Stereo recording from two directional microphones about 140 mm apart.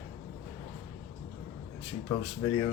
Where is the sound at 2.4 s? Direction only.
15° left (ahead or behind).